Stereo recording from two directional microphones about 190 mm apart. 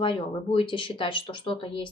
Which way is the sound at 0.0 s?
25° left (ahead or behind).